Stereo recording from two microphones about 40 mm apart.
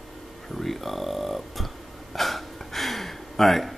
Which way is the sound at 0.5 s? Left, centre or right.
Centre.